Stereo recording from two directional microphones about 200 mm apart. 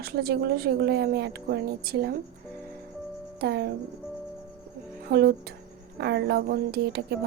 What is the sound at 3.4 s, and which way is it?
Speech, 55° right (ahead or behind).